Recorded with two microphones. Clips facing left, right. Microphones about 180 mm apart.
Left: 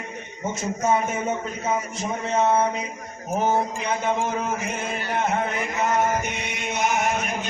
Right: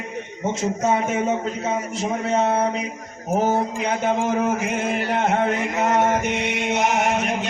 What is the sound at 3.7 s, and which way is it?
Chant, 80° right.